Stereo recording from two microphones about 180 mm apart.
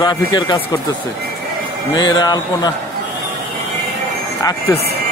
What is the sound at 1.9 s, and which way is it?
Speech, 25° left (ahead or behind).